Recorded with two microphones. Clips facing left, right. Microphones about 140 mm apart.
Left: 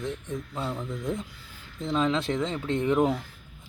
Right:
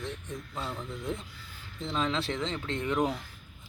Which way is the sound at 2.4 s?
10° left (ahead or behind).